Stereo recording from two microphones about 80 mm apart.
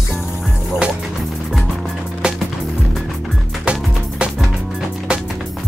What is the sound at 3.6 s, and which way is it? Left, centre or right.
Music, centre.